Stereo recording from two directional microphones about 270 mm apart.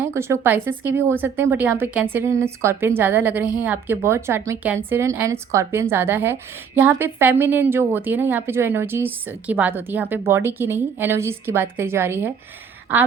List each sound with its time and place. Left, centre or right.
0.0 s a woman's voice: centre